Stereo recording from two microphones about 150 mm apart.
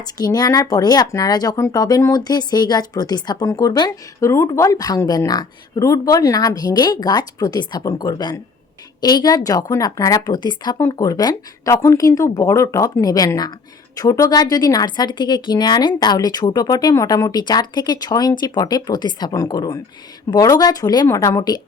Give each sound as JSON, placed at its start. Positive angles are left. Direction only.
{"t": 0.0, "sound": "speech", "side_deg": 25}